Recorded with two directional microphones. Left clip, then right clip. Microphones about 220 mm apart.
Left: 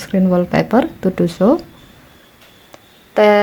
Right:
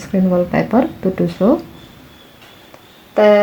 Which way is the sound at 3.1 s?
35° left (ahead or behind).